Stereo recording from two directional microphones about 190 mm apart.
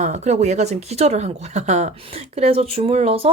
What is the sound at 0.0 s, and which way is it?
A woman's voice, 35° right (ahead or behind).